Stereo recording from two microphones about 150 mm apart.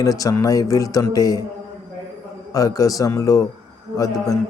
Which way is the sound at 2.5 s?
25° left (ahead or behind).